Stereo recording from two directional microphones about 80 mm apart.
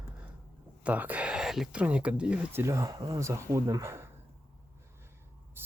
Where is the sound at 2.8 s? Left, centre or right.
Right.